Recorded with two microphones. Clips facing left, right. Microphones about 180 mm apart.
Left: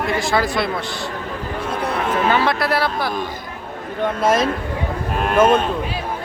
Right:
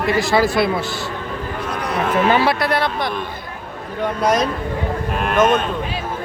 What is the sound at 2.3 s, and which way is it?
Speech, 10° right (ahead or behind).